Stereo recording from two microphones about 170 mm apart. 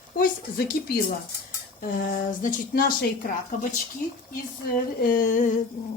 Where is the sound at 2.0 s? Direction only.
55° left (ahead or behind).